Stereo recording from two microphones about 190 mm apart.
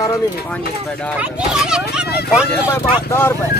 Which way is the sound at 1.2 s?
5° right (ahead or behind).